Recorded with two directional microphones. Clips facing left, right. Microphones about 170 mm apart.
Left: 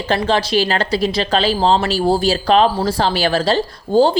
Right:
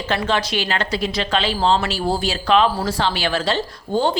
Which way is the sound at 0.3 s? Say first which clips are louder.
Left 5 dB; 35° left (ahead or behind).